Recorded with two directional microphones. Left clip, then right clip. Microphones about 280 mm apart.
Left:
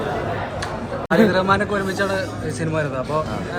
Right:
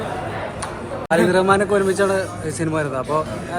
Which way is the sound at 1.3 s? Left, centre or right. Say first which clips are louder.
Right 2 dB; centre.